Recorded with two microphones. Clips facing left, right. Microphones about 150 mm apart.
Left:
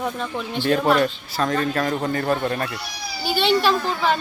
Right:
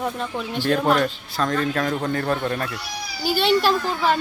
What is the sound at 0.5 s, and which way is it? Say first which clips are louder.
A woman's voice: left 1 dB; centre (ahead or behind).